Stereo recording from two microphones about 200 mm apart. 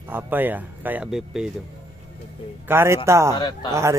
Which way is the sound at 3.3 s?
20° left (ahead or behind).